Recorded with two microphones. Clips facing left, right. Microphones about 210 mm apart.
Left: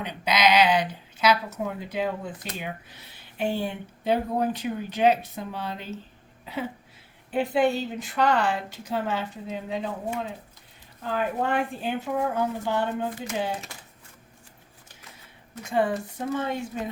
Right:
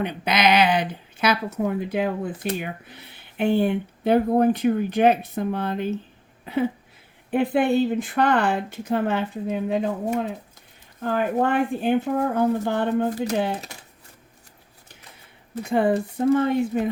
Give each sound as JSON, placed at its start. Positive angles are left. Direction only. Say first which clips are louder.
{"t": 0.0, "sound": "speech", "louder": "right 2 dB", "side_deg": -55}
{"t": 6.4, "sound": "a sound", "louder": "right 9 dB", "side_deg": -55}
{"t": 7.3, "sound": "speech", "louder": "right 3 dB", "side_deg": -55}
{"t": 15.6, "sound": "speech", "louder": "right 5 dB", "side_deg": -55}